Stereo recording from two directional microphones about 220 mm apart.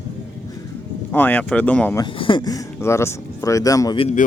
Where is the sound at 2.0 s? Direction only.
20° left (ahead or behind).